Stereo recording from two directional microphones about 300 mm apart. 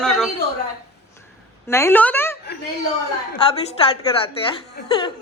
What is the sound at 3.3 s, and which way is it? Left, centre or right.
Speech, centre.